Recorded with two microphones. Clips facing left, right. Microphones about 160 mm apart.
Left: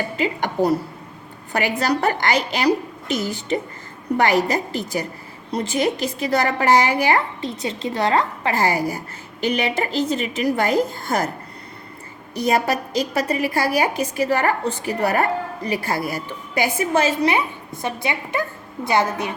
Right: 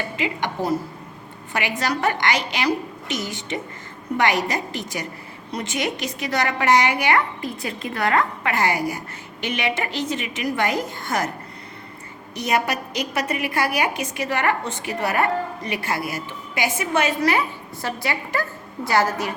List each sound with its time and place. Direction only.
0.2 s a woman's voice: 40° left (ahead or behind)
1.8 s a woman's voice: 35° left (ahead or behind)
12.5 s a woman's voice: 35° left (ahead or behind)